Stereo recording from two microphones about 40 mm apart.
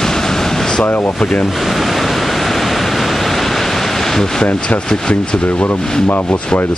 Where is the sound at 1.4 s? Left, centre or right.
Centre.